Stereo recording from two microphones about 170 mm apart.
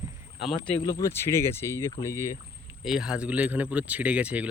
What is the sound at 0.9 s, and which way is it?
Speech, 20° left (ahead or behind).